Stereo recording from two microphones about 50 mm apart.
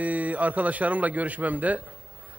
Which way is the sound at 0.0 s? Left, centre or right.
Right.